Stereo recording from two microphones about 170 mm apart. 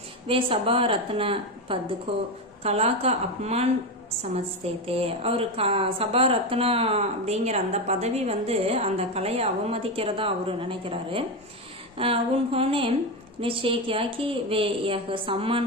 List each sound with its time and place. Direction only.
0.3 s a woman's voice: 35° right (ahead or behind)
4.8 s a woman's voice: 35° right (ahead or behind)